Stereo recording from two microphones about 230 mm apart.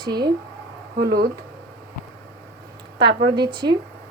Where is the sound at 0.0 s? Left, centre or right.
Centre.